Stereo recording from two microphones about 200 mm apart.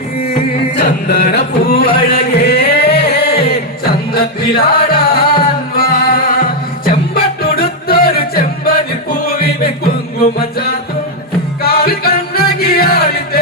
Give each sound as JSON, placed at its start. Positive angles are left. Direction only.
{"t": 0.8, "sound": "chant", "side_deg": 55}
{"t": 1.6, "sound": "music", "side_deg": 50}
{"t": 11.6, "sound": "music", "side_deg": 50}